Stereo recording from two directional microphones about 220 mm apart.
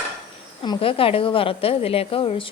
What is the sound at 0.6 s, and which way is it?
A woman's voice, 20° left (ahead or behind).